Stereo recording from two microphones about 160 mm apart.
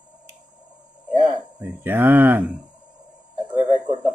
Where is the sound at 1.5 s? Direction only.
10° right (ahead or behind).